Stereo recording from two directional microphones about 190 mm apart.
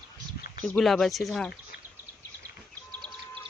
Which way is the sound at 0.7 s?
Centre (ahead or behind).